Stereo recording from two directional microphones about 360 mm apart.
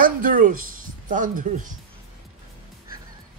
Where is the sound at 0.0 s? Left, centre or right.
Right.